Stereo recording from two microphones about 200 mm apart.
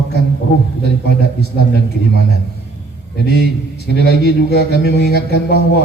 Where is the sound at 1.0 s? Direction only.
55° left (ahead or behind).